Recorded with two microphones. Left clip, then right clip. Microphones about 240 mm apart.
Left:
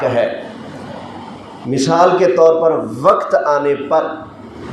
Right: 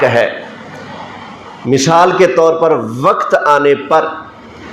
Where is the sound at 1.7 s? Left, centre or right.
Right.